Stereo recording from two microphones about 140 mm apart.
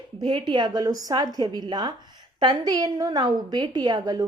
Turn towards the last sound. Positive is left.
turn(degrees=-30)  # may be behind; listen again after turning